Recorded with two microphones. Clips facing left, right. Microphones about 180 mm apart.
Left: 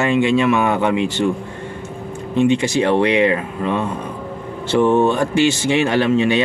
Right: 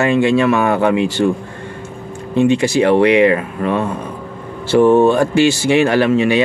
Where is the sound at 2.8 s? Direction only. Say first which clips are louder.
Right 5 dB; 20° right (ahead or behind).